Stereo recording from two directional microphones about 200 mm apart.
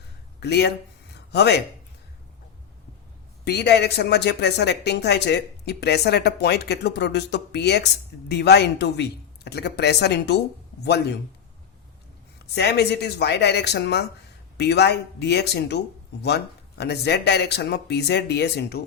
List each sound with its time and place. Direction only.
0.3 s speech: 55° left (ahead or behind)
1.1 s a sound: 55° left (ahead or behind)
3.4 s speech: 55° left (ahead or behind)
12.5 s speech: 55° left (ahead or behind)